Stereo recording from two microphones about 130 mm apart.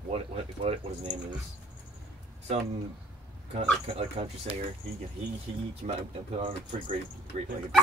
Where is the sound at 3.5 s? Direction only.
50° right (ahead or behind).